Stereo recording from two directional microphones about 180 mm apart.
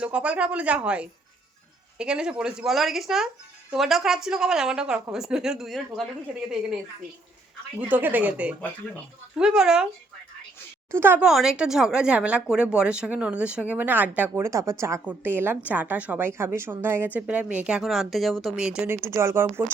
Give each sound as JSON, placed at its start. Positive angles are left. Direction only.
{"t": 0.0, "sound": "a woman's voice", "side_deg": -5}
{"t": 7.8, "sound": "a woman's voice", "side_deg": -10}
{"t": 10.9, "sound": "a woman's voice", "side_deg": -10}
{"t": 19.0, "sound": "speech", "side_deg": -15}